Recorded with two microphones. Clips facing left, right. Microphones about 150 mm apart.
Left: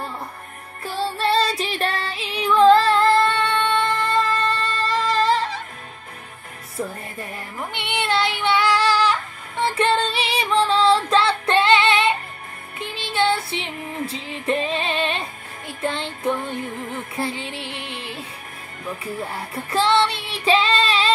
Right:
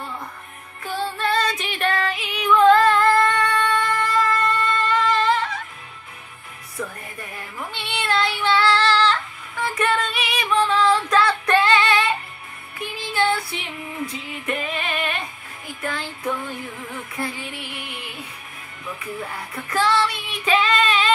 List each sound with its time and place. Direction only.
0.8 s music: 35° left (ahead or behind)
6.8 s music: 35° left (ahead or behind)
7.7 s child singing: 20° left (ahead or behind)
9.6 s music: 30° left (ahead or behind)
19.5 s child singing: 30° left (ahead or behind)